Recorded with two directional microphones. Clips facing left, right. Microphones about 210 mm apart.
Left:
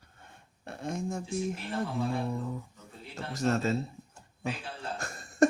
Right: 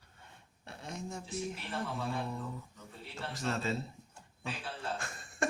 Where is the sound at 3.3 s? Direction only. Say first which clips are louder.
Left 7 dB; 45° left (ahead or behind).